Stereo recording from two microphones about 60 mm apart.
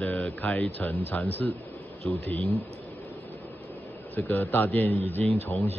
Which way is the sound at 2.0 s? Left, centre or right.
Centre.